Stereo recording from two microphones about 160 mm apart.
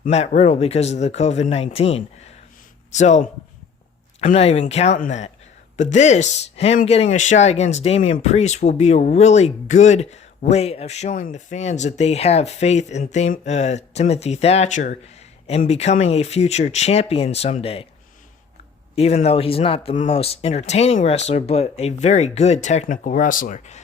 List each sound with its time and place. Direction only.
0.0 s speech: 45° left (ahead or behind)
18.9 s speech: 40° left (ahead or behind)